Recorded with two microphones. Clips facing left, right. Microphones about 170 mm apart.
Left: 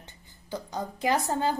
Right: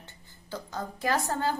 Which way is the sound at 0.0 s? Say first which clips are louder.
Even; 15° left (ahead or behind).